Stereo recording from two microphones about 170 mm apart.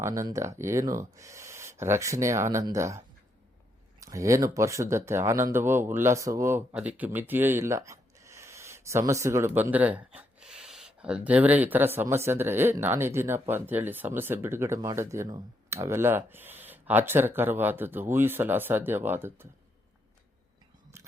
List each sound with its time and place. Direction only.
0.0 s speech: 20° right (ahead or behind)
4.0 s speech: 20° right (ahead or behind)